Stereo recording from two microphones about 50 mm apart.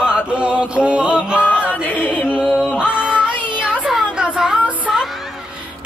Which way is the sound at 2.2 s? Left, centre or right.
Centre.